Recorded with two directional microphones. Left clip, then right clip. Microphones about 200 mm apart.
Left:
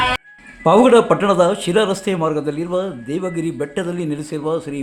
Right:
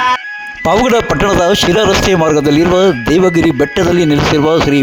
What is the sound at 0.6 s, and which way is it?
Speech, 50° right (ahead or behind).